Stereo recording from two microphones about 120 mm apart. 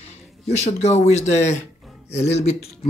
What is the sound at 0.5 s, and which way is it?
Speech, 65° left (ahead or behind).